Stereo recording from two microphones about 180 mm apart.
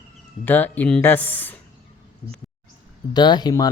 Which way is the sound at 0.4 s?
10° left (ahead or behind).